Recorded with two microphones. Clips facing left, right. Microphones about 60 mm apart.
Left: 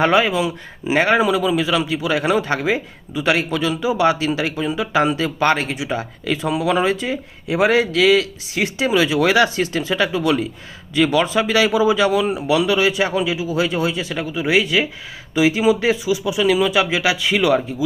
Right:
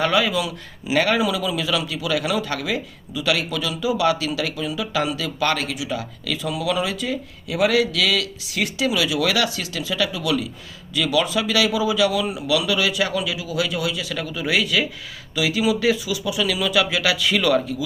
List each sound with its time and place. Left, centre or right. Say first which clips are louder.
0.0 s speech: left 4 dB; left